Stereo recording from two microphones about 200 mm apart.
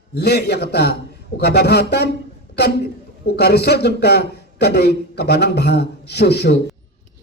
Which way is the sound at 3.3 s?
55° left (ahead or behind).